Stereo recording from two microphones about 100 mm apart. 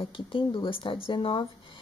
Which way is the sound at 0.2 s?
55° left (ahead or behind).